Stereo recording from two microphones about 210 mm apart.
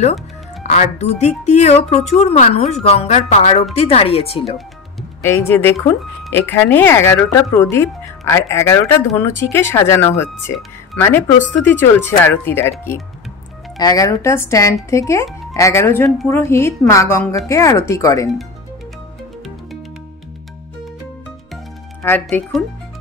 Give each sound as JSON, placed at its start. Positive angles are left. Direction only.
{"t": 0.7, "sound": "a woman's voice", "side_deg": 35}
{"t": 5.2, "sound": "speech", "side_deg": 10}
{"t": 22.0, "sound": "speech", "side_deg": 10}